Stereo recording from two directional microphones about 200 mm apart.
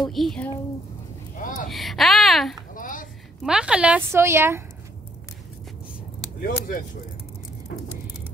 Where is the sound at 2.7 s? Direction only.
40° left (ahead or behind).